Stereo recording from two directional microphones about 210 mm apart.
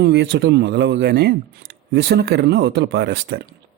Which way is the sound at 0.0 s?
55° right (ahead or behind).